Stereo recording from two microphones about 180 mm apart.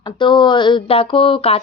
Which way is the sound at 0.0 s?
25° left (ahead or behind).